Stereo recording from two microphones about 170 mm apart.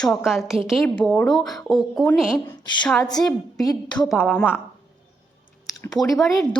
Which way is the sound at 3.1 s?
20° left (ahead or behind).